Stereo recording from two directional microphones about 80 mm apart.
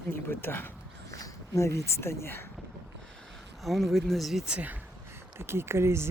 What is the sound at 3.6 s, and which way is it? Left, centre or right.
Speech, centre.